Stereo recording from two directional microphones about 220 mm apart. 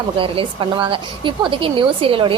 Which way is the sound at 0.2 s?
20° right (ahead or behind).